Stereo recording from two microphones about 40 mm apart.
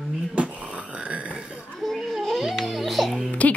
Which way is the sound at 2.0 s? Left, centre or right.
Centre.